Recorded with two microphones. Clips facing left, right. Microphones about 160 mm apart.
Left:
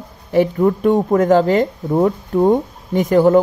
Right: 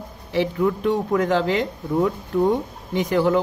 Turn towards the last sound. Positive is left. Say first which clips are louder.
# left 7 dB
turn(degrees=45)  # may be behind; listen again after turning